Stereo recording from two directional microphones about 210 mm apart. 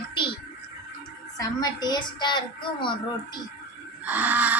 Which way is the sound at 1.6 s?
20° left (ahead or behind).